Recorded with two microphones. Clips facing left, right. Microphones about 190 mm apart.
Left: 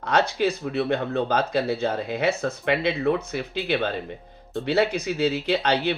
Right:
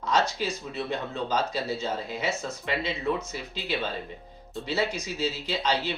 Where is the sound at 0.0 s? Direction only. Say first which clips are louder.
Left 5 dB; 60° left (ahead or behind).